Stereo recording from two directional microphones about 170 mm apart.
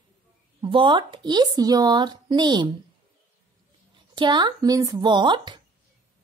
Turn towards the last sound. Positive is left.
turn(degrees=-25)  # may be behind; listen again after turning